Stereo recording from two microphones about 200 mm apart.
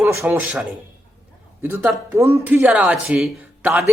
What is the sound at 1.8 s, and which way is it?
A man's voice, 15° right (ahead or behind).